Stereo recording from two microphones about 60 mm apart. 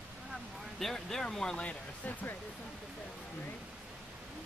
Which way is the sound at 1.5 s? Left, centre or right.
Left.